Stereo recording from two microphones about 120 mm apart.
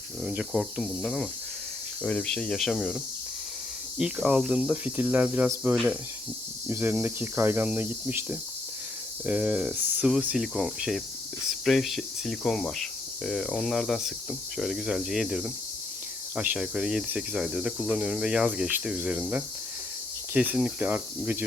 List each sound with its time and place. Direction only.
0.2 s speech: 10° right (ahead or behind)
3.9 s cricket: 5° right (ahead or behind)
5.7 s speech: centre (ahead or behind)
6.7 s cricket: 15° right (ahead or behind)
11.6 s speech: centre (ahead or behind)
17.1 s cricket: 10° right (ahead or behind)